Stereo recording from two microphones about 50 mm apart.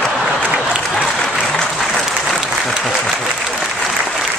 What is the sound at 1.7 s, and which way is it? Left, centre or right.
Applause, centre.